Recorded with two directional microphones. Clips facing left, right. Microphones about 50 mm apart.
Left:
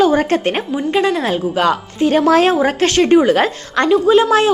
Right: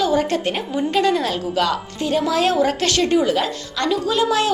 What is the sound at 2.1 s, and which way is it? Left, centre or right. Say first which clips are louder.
Speech: left 7 dB; left.